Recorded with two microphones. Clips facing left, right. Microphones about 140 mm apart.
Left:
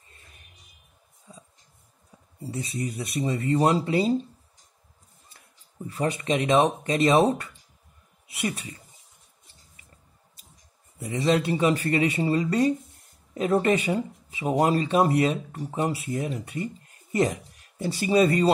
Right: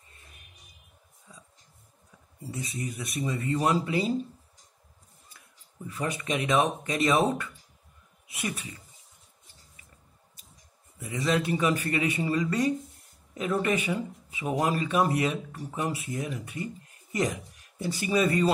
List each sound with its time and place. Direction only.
2.5 s speech: 30° left (ahead or behind)
5.9 s speech: 30° left (ahead or behind)
11.0 s speech: 30° left (ahead or behind)